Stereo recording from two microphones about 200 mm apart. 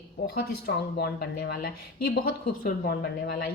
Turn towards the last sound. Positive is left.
turn(degrees=50)  # may be behind; listen again after turning